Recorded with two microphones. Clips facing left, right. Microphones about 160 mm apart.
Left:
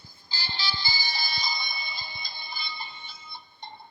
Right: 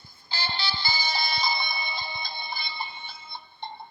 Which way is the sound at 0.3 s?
65° right (ahead or behind).